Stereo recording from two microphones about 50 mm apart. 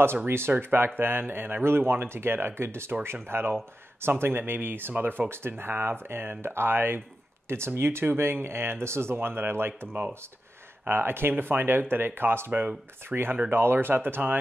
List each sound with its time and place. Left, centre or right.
0.5 s speech: right
5.3 s speech: right
7.4 s speech: right
10.9 s speech: right